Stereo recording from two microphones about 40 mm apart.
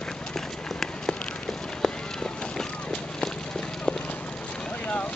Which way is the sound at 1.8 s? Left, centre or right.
Centre.